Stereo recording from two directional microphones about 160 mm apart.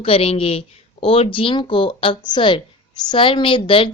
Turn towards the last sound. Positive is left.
turn(degrees=30)  # may be behind; listen again after turning